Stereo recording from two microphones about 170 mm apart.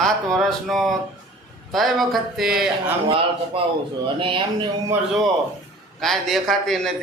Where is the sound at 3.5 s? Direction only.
35° right (ahead or behind).